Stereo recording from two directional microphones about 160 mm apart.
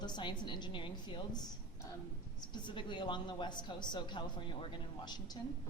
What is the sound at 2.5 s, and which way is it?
A woman's voice, 30° left (ahead or behind).